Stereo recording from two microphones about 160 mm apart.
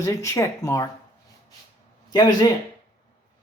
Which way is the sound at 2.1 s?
25° left (ahead or behind).